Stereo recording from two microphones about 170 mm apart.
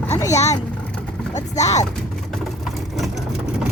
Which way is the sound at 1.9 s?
5° left (ahead or behind).